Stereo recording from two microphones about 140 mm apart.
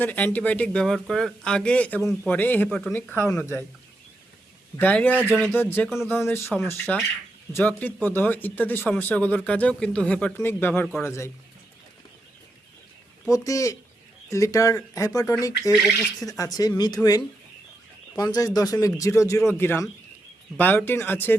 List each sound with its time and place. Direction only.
0.0 s speech: 10° left (ahead or behind)
4.8 s speech: 10° left (ahead or behind)
13.3 s speech: 25° left (ahead or behind)